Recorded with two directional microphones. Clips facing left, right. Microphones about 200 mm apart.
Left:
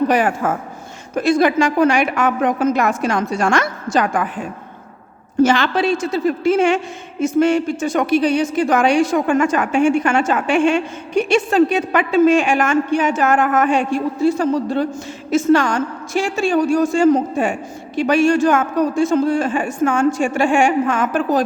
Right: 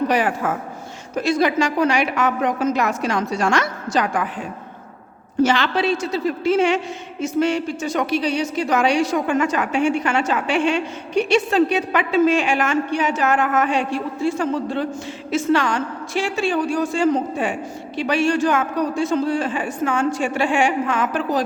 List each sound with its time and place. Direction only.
0.1 s a woman's voice: 45° left (ahead or behind)